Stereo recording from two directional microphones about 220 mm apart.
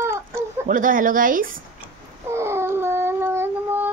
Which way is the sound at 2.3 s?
10° right (ahead or behind).